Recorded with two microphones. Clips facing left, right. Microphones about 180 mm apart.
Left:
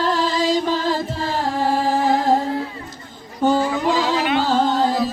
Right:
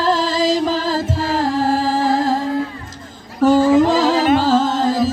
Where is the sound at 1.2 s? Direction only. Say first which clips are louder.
Right 4 dB; 90° right.